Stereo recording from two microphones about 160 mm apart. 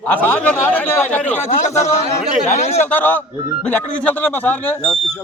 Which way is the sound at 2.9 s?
10° left (ahead or behind).